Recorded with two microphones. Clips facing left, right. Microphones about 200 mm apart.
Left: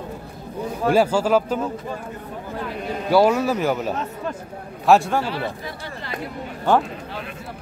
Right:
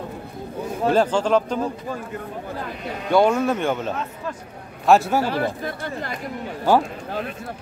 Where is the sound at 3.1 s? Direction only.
5° left (ahead or behind).